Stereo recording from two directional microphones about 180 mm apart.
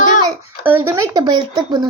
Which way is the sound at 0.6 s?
10° right (ahead or behind).